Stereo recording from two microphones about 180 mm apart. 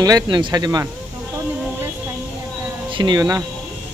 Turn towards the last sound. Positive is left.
turn(degrees=-20)  # may be behind; listen again after turning